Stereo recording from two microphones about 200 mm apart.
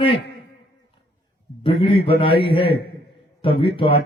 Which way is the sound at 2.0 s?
25° left (ahead or behind).